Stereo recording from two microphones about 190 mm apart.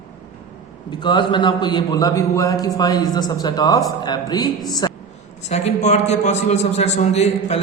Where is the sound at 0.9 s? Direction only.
25° left (ahead or behind).